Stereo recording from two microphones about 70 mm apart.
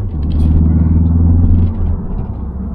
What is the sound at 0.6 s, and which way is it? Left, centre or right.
Vehicle, centre.